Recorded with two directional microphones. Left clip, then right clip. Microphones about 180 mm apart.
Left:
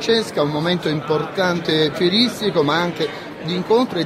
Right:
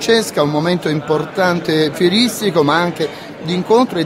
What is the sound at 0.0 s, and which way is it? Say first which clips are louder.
Speech: right 4 dB; 25° right (ahead or behind).